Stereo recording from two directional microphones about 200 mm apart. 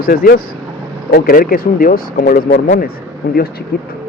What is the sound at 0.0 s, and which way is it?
Speech, 45° left (ahead or behind).